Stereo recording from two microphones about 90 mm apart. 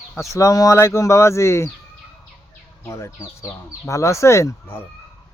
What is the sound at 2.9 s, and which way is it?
Speech, 30° left (ahead or behind).